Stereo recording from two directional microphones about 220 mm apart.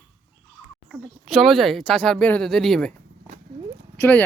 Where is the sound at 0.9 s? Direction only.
Centre (ahead or behind).